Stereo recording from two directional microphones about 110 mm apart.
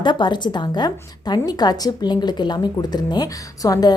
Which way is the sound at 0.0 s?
45° left (ahead or behind).